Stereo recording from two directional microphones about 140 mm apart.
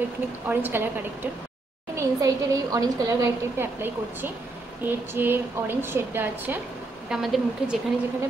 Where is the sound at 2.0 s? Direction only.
25° right (ahead or behind).